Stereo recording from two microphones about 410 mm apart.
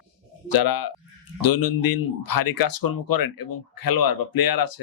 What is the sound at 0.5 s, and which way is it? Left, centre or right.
Speech, left.